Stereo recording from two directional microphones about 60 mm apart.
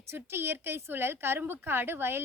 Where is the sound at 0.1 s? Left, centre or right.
Right.